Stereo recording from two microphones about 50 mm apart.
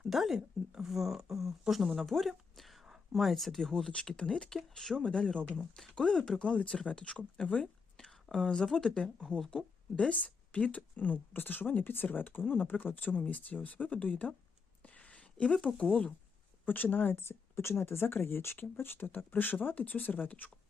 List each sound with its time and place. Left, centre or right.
0.0 s speech: centre
4.2 s speech: centre
4.4 s speech: centre
6.4 s speech: left
7.6 s speech: centre; by 14.3 s left
14.8 s a sound: left
15.6 s speech: left
16.6 s speech: left